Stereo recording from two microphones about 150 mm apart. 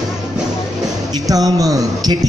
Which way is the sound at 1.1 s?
25° right (ahead or behind).